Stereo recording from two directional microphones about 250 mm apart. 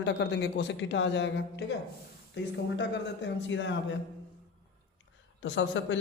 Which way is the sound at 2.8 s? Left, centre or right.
Left.